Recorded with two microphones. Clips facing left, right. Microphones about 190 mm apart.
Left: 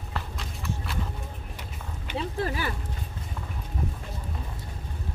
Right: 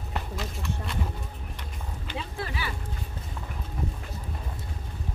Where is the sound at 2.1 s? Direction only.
40° left (ahead or behind).